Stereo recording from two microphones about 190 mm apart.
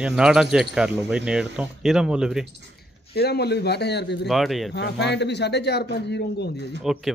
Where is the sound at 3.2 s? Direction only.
60° left (ahead or behind).